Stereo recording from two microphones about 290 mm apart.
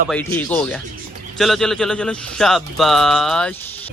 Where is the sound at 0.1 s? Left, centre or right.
Centre.